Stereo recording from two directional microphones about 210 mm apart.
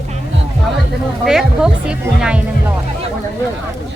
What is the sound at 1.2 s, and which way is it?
Speech, 5° right (ahead or behind).